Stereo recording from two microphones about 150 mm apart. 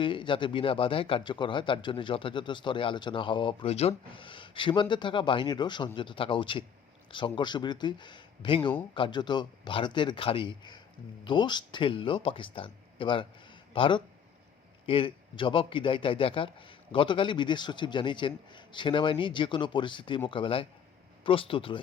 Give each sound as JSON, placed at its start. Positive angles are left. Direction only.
{"t": 0.0, "sound": "speech", "side_deg": 35}